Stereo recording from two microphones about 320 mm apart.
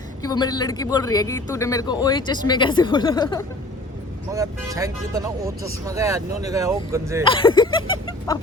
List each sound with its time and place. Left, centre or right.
0.2 s a man's voice: centre
4.3 s speech: centre
7.3 s a man's voice: centre